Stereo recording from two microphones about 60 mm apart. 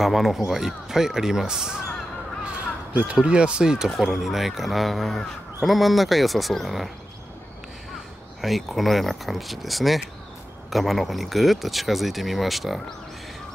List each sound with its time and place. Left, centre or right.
0.0 s speech: centre
2.9 s speech: right
3.2 s speech: centre
8.4 s speech: centre